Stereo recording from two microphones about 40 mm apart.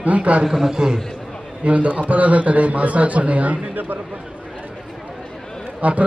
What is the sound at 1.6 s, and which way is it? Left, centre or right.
A man's voice, right.